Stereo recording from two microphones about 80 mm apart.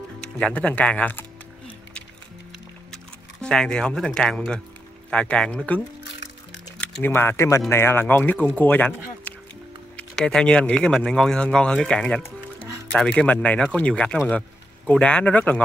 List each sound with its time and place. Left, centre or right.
0.2 s speech: centre
3.4 s speech: centre
7.0 s speech: left
9.9 s speech: centre